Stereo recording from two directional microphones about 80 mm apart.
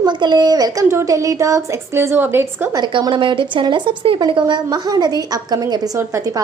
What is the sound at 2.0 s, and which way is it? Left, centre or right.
Speech, right.